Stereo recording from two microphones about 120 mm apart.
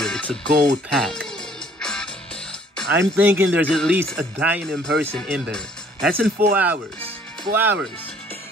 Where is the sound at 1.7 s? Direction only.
5° left (ahead or behind).